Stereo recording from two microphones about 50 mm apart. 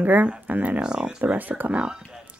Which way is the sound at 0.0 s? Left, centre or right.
Right.